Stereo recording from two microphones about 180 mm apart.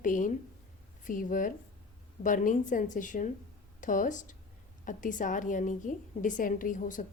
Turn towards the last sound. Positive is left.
turn(degrees=45)  # may be behind; listen again after turning